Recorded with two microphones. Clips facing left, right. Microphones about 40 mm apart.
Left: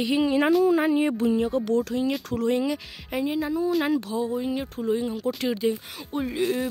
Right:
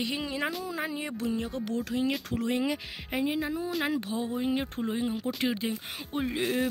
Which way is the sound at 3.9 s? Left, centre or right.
Right.